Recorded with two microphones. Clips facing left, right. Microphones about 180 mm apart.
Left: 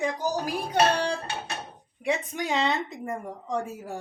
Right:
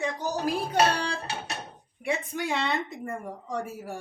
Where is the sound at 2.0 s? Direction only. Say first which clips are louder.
Left 2 dB; 20° left (ahead or behind).